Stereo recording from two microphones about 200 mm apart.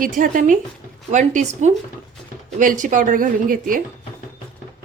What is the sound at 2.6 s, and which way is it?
Speech, 40° right (ahead or behind).